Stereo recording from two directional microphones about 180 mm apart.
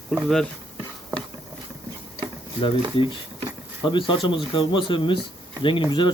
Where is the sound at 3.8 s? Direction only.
25° left (ahead or behind).